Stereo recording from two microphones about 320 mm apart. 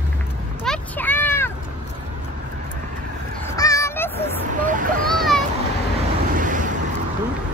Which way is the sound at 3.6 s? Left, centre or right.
Centre.